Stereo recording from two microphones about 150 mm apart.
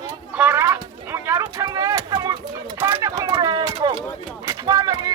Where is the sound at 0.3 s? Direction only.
15° right (ahead or behind); by 4.0 s 30° right (ahead or behind).